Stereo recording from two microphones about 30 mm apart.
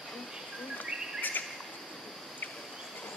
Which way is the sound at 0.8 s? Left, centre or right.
Left.